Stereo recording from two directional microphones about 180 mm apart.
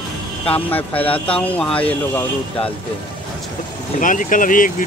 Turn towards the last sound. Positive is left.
turn(degrees=50)  # may be behind; listen again after turning